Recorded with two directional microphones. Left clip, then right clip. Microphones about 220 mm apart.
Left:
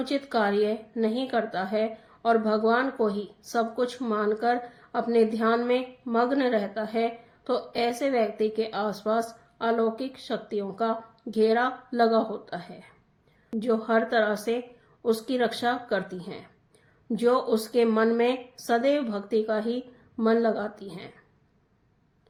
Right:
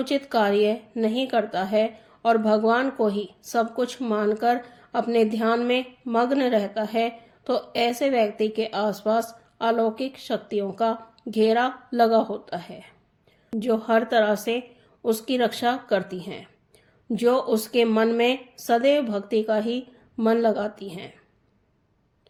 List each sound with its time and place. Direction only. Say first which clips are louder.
0.0 s speech: right 3 dB; 35° right (ahead or behind)